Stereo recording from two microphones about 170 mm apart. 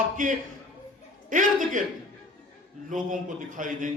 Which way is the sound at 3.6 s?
50° right (ahead or behind).